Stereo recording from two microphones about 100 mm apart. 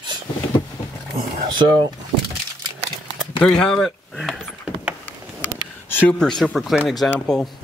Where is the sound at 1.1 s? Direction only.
45° right (ahead or behind).